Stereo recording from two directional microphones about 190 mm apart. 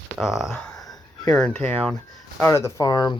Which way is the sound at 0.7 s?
20° left (ahead or behind).